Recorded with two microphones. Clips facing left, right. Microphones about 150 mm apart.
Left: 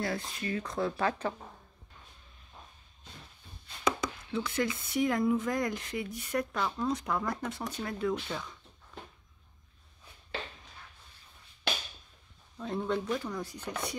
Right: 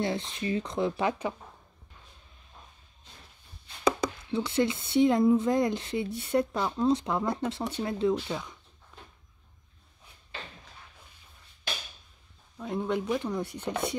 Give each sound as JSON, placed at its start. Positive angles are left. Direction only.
{"t": 0.0, "sound": "speech", "side_deg": -25}
{"t": 3.8, "sound": "speech", "side_deg": -35}
{"t": 12.5, "sound": "speech", "side_deg": -10}